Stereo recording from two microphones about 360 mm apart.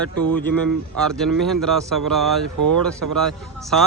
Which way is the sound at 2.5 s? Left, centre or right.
Right.